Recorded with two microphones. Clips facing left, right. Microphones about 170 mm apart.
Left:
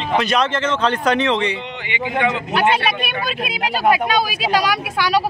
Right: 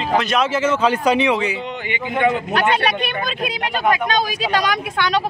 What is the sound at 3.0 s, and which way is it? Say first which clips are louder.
Speech: right 1 dB; 10° left (ahead or behind).